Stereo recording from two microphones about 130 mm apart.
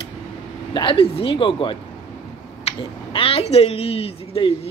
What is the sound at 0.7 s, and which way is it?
Speech, 45° left (ahead or behind).